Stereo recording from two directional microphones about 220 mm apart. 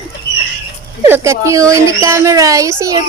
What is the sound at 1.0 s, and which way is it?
Speech, 10° right (ahead or behind).